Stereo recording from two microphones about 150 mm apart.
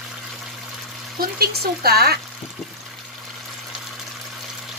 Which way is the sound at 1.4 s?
90° right.